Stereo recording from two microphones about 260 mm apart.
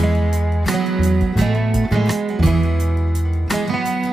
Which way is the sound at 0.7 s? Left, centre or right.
Centre.